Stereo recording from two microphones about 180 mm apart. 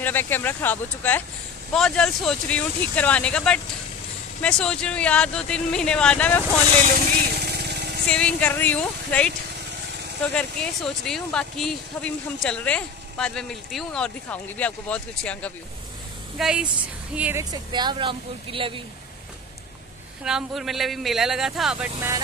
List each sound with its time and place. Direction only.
0.0 s speech: 10° left (ahead or behind)
7.3 s vehicle: 65° right (ahead or behind)
8.1 s speech: 5° left (ahead or behind)
10.3 s speech: 5° left (ahead or behind); by 18.7 s 30° right (ahead or behind)
20.2 s speech: centre (ahead or behind)